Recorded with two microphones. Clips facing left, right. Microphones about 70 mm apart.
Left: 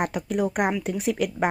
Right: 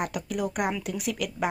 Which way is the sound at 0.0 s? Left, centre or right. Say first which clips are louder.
Left 5 dB; left.